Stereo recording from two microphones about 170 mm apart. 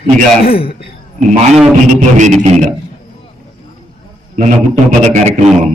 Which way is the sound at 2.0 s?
45° right (ahead or behind).